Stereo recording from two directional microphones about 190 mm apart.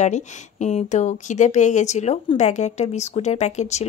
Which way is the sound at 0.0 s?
40° left (ahead or behind).